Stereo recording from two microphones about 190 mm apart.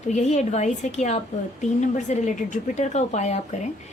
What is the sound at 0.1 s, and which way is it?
A woman's voice, 40° left (ahead or behind).